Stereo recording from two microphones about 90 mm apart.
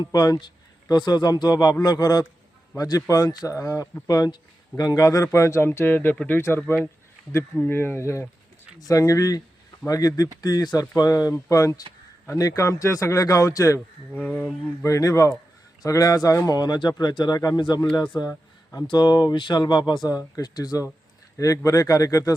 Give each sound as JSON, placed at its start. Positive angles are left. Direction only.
{"t": 0.0, "sound": "a man's voice", "side_deg": 45}
{"t": 7.6, "sound": "a man's voice", "side_deg": 25}
{"t": 14.1, "sound": "speech", "side_deg": 20}
{"t": 14.8, "sound": "a man's voice", "side_deg": 35}
{"t": 17.9, "sound": "a man's voice", "side_deg": 55}
{"t": 18.3, "sound": "a sound", "side_deg": 40}
{"t": 18.9, "sound": "a man's voice", "side_deg": 50}